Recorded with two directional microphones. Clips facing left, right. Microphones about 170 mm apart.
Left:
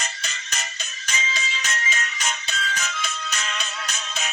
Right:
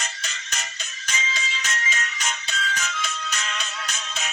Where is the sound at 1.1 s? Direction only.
35° left (ahead or behind).